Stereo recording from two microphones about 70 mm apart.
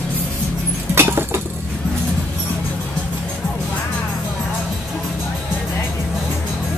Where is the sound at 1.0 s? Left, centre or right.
Right.